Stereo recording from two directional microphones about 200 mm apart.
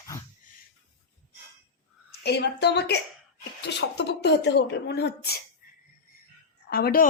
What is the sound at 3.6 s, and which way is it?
Speech, 55° left (ahead or behind).